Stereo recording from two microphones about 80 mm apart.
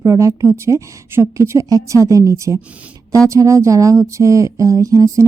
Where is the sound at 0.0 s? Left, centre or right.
Right.